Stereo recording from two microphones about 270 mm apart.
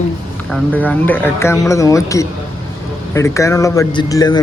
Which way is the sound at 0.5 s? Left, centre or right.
Centre.